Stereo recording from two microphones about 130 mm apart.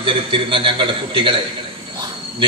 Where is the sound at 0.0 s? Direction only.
40° right (ahead or behind).